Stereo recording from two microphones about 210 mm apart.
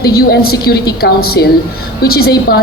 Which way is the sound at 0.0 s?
50° left (ahead or behind).